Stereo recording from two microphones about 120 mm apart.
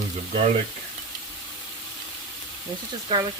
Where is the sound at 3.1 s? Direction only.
35° right (ahead or behind).